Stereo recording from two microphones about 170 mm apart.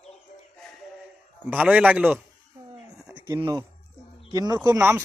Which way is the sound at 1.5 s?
10° right (ahead or behind).